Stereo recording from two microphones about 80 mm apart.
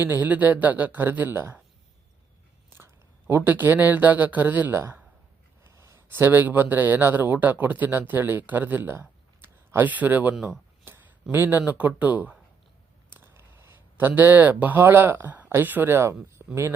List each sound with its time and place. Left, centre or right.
0.0 s speech: right
2.7 s speech: right
5.6 s speech: right
9.0 s a sound: right
10.3 s speech: centre
10.8 s speech: right
13.1 s a sound: right
14.2 s speech: right
16.4 s a sound: centre